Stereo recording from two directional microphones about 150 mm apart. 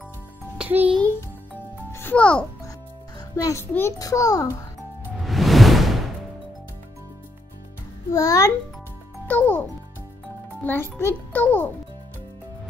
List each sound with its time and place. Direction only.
0.6 s music: 10° right (ahead or behind)
1.9 s music: 15° left (ahead or behind)
3.2 s a child's voice: 20° left (ahead or behind)
5.2 s music: centre (ahead or behind)
8.1 s a child's voice: 20° left (ahead or behind)